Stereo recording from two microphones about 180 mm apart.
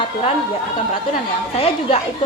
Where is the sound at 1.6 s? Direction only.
35° left (ahead or behind).